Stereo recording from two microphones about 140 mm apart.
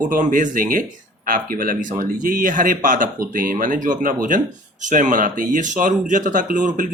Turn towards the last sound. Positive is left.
turn(degrees=-70)  # may be behind; listen again after turning